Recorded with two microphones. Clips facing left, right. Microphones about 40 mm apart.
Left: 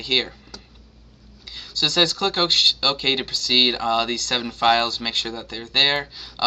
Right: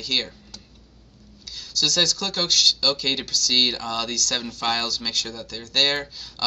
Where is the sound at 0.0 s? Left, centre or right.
Left.